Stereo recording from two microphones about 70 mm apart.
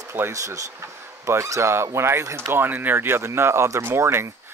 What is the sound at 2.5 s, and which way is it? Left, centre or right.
Speech, right.